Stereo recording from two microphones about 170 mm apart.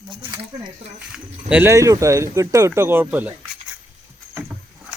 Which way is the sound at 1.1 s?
10° right (ahead or behind).